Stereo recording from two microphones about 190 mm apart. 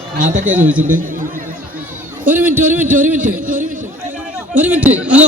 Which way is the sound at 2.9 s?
45° right (ahead or behind).